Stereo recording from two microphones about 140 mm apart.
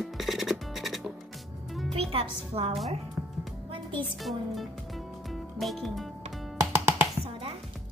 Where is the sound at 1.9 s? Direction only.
45° right (ahead or behind).